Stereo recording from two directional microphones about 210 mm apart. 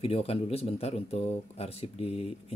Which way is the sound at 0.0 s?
25° left (ahead or behind).